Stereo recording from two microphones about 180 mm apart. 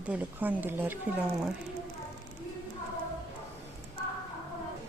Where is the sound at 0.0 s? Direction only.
10° right (ahead or behind).